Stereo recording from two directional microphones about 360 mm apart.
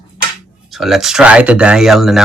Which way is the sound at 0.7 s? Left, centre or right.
Centre.